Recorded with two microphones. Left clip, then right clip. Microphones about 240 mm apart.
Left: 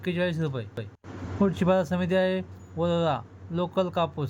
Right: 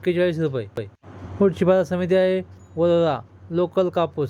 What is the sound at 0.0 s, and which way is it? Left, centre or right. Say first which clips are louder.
Speech: right 8 dB; centre.